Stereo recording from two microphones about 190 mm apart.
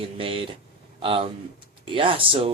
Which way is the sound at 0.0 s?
30° right (ahead or behind).